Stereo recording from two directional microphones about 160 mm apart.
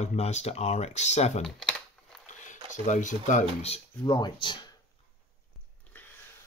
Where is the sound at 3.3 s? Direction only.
45° left (ahead or behind).